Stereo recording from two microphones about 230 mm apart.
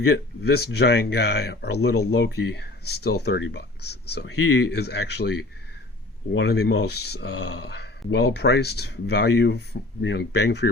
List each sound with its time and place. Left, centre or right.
0.1 s speech: left